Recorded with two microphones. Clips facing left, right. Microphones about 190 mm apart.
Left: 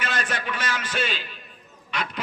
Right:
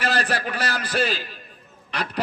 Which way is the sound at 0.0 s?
35° right (ahead or behind).